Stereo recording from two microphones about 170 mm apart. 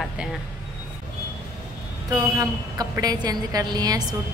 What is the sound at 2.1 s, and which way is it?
A woman's voice, 20° right (ahead or behind).